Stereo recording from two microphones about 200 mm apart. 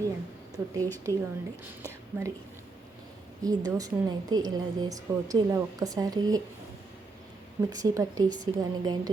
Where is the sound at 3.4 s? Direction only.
20° right (ahead or behind).